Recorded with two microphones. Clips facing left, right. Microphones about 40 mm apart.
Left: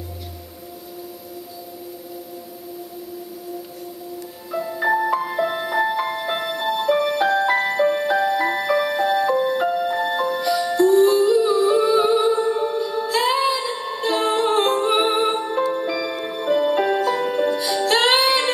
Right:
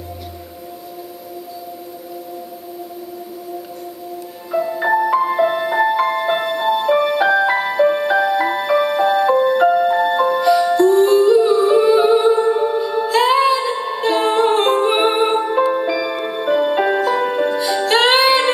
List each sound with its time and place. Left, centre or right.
4.5 s music: centre